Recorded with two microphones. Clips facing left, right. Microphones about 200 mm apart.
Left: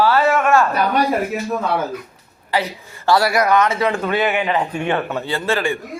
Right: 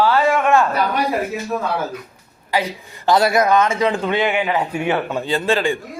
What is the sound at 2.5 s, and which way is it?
A man's voice, 15° right (ahead or behind).